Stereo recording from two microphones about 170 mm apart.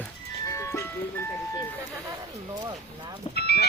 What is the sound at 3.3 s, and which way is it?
Vehicle, 70° left (ahead or behind).